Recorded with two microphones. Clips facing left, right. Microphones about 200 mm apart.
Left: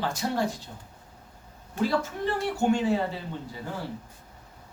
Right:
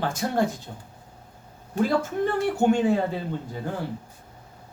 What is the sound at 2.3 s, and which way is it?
Speech, 55° right (ahead or behind).